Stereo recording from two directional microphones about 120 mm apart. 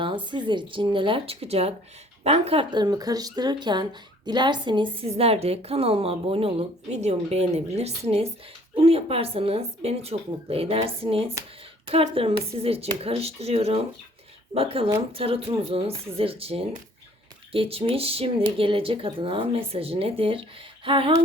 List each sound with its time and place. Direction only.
0.3 s speech: 40° right (ahead or behind)
2.6 s speech: 35° right (ahead or behind)
5.0 s speech: 55° right (ahead or behind)
20.8 s a sound: 45° right (ahead or behind)